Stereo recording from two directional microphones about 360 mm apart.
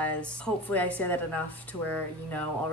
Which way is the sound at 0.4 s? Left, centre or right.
Centre.